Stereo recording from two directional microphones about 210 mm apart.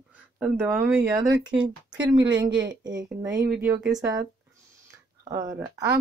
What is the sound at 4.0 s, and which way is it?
Speech, 15° right (ahead or behind).